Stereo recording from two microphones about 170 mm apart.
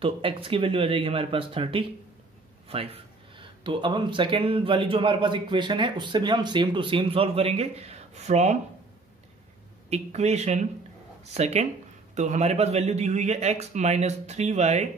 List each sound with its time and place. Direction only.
0.0 s speech: 30° right (ahead or behind)
9.8 s speech: 40° right (ahead or behind)